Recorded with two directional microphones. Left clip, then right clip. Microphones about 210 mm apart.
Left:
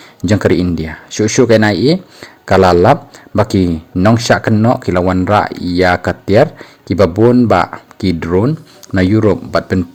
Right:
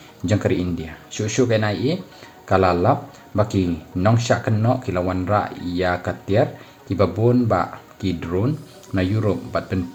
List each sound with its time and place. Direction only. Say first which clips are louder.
0.2 s speech: left 9 dB; 45° left (ahead or behind)